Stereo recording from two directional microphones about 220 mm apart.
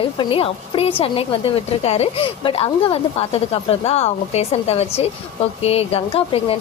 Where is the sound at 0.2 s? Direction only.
25° left (ahead or behind).